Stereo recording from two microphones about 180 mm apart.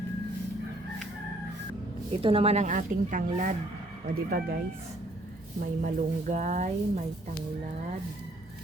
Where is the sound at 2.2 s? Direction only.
30° right (ahead or behind); by 4.5 s 55° right (ahead or behind).